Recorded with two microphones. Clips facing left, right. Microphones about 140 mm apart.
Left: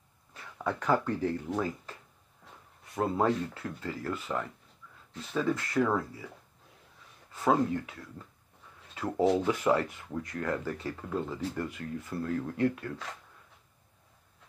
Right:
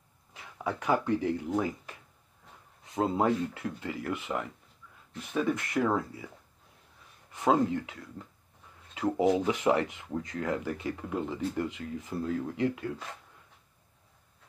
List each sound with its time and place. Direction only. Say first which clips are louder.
0.3 s speech: left 1 dB; 15° right (ahead or behind)
2.8 s speech: right 1 dB; 20° right (ahead or behind)
7.3 s speech: right 1 dB; 20° right (ahead or behind)
8.9 s speech: right 1 dB; 15° right (ahead or behind)